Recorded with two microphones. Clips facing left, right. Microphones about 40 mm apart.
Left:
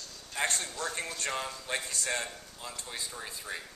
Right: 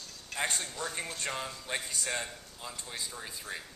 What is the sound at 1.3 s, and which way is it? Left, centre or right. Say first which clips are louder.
Speech: left 2 dB; centre.